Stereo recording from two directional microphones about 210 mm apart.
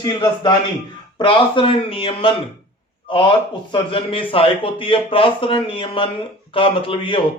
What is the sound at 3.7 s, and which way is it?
A man's voice, 25° left (ahead or behind).